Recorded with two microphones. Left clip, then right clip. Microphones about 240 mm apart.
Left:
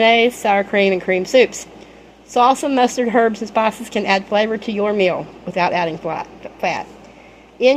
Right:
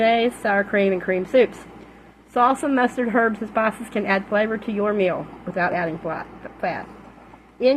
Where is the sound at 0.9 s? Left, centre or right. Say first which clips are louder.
Left 5 dB; left.